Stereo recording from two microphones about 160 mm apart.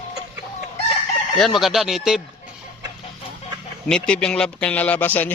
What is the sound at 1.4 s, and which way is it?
Speech, centre (ahead or behind).